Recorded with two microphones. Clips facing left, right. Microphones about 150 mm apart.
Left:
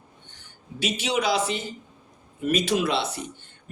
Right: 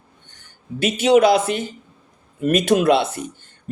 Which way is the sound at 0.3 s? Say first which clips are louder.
Right 11 dB; 50° right (ahead or behind).